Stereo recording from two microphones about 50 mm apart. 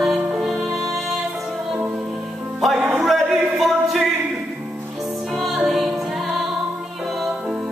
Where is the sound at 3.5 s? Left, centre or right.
Centre.